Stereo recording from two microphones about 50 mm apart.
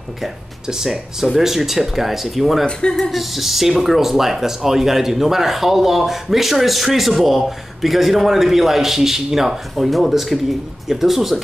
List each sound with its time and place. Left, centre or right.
0.2 s speech: centre
2.6 s speech: centre
3.0 s speech: centre